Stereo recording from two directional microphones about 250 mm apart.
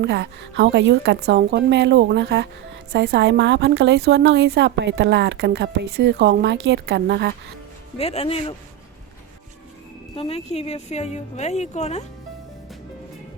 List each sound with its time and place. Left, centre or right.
0.0 s a woman's voice: right
7.9 s a woman's voice: left
10.2 s a woman's voice: left